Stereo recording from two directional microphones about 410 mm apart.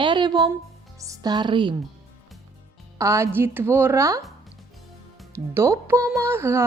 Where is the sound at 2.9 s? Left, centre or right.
Centre.